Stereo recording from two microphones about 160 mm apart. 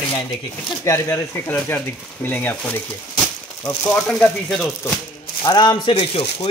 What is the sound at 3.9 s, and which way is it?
Speech, 5° left (ahead or behind).